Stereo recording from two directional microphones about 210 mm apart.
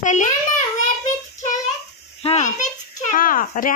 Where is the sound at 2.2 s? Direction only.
35° left (ahead or behind).